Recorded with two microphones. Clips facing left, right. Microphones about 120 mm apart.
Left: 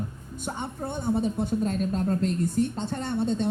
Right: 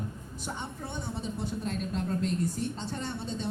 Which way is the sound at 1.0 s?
50° left (ahead or behind).